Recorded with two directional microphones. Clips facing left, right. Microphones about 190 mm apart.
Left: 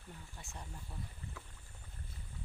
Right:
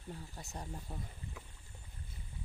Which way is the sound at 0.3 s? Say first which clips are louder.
Right 5 dB; 40° right (ahead or behind).